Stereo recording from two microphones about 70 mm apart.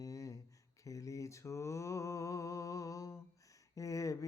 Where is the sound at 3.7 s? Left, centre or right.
Left.